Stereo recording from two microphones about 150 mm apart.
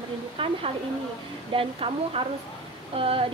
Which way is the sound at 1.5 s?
40° right (ahead or behind).